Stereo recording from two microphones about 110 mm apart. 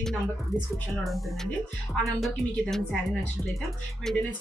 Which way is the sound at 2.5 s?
5° left (ahead or behind).